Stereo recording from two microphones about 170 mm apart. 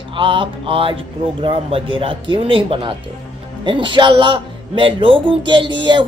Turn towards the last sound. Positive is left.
turn(degrees=-30)  # may be behind; listen again after turning